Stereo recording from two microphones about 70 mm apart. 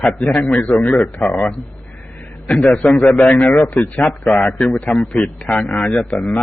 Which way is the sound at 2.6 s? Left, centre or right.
Centre.